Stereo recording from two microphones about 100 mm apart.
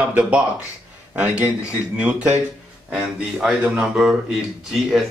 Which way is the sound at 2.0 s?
15° right (ahead or behind).